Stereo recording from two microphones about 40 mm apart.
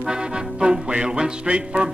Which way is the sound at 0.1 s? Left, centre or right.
Right.